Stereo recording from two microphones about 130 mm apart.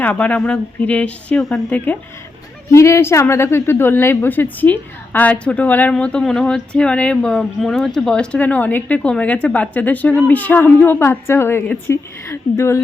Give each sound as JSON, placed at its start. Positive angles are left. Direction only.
{"t": 0.0, "sound": "a woman's voice", "side_deg": 10}